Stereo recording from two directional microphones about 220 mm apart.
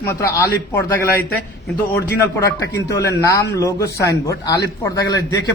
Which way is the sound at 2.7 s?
15° left (ahead or behind).